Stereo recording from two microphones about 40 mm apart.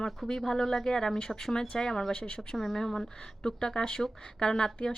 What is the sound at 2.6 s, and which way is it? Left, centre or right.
A woman's voice, centre.